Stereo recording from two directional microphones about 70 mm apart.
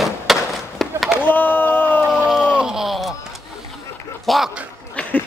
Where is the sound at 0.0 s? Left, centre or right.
Centre.